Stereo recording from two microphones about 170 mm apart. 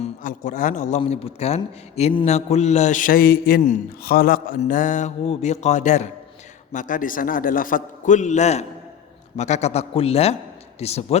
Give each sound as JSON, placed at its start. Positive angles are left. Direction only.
{"t": 0.0, "sound": "a man's voice", "side_deg": 45}
{"t": 4.6, "sound": "a man's voice", "side_deg": 50}